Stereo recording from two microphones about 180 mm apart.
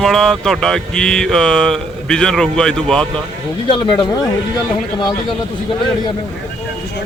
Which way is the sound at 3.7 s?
25° left (ahead or behind).